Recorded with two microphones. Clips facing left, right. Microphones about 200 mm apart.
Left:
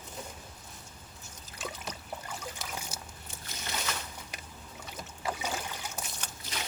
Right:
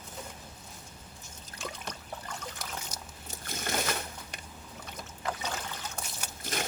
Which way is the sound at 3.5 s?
50° right (ahead or behind).